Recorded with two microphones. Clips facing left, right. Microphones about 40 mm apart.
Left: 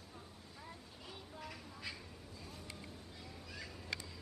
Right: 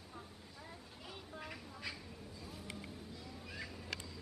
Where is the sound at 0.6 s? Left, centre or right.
Centre.